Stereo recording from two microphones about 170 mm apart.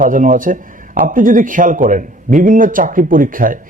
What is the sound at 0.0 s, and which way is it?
A man's voice, 50° right (ahead or behind).